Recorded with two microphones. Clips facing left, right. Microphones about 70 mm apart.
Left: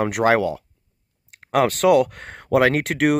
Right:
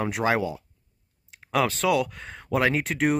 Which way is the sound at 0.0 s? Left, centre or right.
Left.